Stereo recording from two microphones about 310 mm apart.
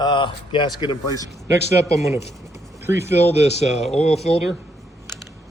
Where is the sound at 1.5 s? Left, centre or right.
Centre.